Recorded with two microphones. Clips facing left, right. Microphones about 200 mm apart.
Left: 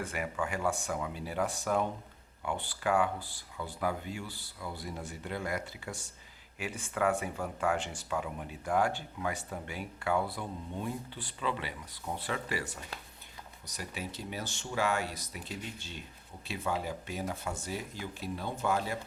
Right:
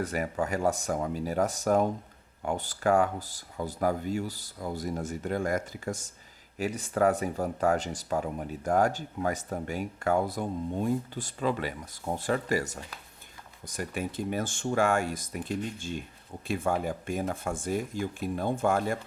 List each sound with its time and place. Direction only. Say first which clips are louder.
0.0 s speech: right 5 dB; 40° right (ahead or behind)